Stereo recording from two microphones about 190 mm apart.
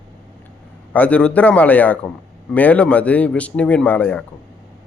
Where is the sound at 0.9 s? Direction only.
10° left (ahead or behind).